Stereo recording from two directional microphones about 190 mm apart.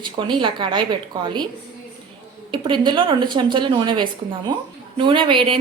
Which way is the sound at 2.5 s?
25° right (ahead or behind).